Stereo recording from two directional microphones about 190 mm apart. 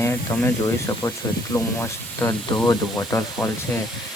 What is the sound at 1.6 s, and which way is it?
Speech, 15° left (ahead or behind).